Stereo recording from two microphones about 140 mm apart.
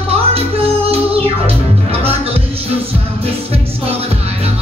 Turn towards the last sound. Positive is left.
turn(degrees=-45)  # may be behind; listen again after turning